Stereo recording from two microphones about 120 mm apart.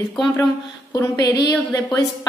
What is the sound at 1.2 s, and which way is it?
Speech, 30° left (ahead or behind).